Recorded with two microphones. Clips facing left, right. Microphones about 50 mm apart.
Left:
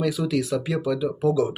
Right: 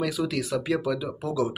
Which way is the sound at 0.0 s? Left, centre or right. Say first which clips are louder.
Left 3 dB; centre.